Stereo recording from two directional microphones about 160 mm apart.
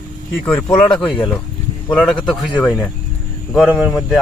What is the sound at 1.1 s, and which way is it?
Speech, 30° left (ahead or behind).